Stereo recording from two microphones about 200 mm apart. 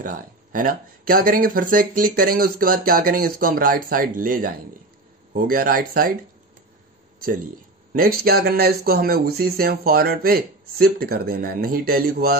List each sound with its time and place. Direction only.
0.0 s speech: 45° right (ahead or behind)
7.9 s speech: 45° right (ahead or behind)